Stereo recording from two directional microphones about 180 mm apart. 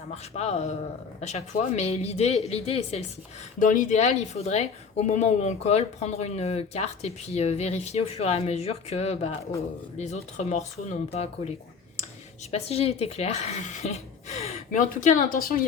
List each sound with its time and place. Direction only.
0.1 s a woman's voice: 35° left (ahead or behind)
3.6 s a woman's voice: 45° left (ahead or behind)
9.4 s speech: 15° left (ahead or behind)
10.0 s a woman's voice: 40° left (ahead or behind)
15.0 s speech: 50° left (ahead or behind)